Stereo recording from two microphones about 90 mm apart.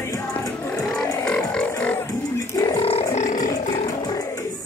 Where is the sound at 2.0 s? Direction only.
40° left (ahead or behind).